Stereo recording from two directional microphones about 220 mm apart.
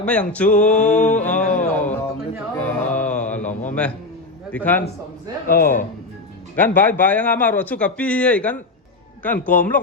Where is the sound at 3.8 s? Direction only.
5° left (ahead or behind).